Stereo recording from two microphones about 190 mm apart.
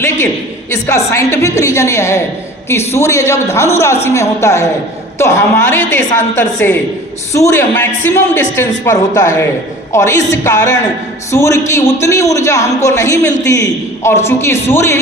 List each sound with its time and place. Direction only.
0.7 s a man's voice: 15° left (ahead or behind)